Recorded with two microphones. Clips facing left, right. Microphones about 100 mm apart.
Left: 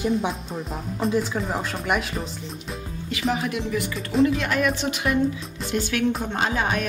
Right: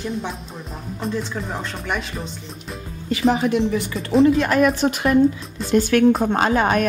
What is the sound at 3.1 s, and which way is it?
Speech, 35° right (ahead or behind).